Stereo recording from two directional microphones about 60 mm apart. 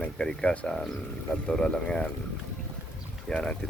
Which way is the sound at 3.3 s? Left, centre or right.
Centre.